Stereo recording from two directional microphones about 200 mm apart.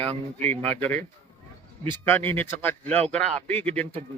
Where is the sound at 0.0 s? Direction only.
35° right (ahead or behind).